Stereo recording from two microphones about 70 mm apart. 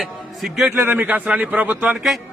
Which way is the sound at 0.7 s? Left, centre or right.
Right.